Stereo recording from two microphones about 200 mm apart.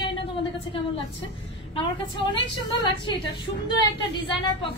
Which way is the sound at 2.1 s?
25° left (ahead or behind).